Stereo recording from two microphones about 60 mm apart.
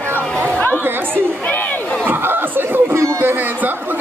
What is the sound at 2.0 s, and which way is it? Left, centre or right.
Speech, right.